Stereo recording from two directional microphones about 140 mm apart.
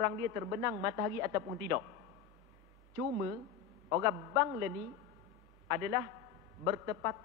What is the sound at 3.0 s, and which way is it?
A woman's voice, 25° right (ahead or behind).